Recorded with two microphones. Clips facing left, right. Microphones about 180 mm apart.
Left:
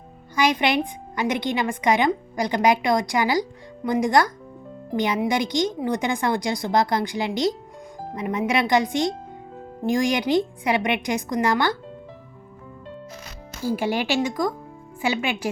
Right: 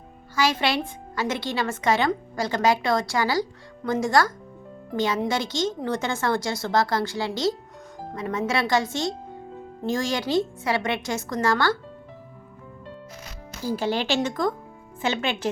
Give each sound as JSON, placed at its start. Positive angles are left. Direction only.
{"t": 0.3, "sound": "speech", "side_deg": 15}
{"t": 13.6, "sound": "speech", "side_deg": 15}